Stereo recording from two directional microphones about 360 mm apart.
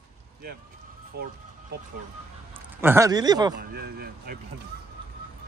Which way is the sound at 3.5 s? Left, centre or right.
Right.